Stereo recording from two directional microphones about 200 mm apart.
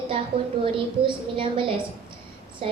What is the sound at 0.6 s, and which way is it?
A woman's voice, 25° right (ahead or behind).